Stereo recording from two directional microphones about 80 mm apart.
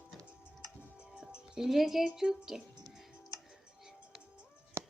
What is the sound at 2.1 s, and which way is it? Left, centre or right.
Speech, centre.